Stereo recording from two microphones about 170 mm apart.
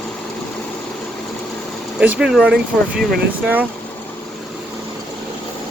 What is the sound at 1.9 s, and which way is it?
Speech, 5° right (ahead or behind).